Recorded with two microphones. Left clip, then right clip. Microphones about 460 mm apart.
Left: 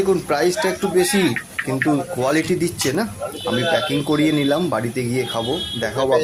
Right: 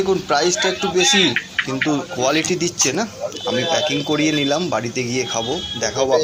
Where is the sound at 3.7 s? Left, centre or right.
Left.